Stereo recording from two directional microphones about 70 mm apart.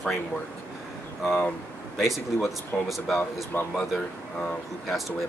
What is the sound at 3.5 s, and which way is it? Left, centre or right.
Speech, left.